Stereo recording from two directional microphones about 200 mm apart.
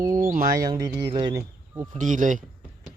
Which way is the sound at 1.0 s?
20° right (ahead or behind).